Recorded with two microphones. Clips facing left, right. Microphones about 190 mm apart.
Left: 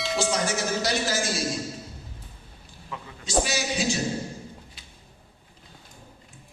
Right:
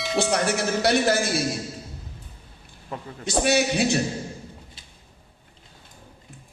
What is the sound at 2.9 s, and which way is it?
Speech, 40° right (ahead or behind).